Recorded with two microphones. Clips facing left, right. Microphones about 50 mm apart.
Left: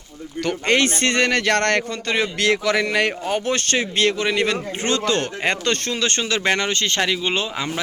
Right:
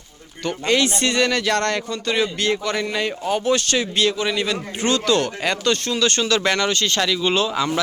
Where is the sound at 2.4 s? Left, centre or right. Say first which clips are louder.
Left 3 dB; left.